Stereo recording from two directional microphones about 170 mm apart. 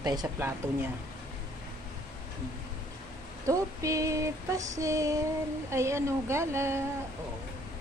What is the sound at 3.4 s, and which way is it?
Female singing, 20° right (ahead or behind).